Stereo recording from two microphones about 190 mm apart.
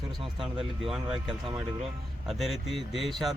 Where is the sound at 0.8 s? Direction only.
Centre (ahead or behind).